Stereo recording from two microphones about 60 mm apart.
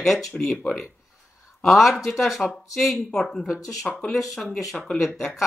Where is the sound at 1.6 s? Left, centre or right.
Centre.